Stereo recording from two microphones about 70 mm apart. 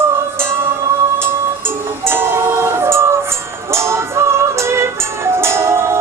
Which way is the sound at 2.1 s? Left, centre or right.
Right.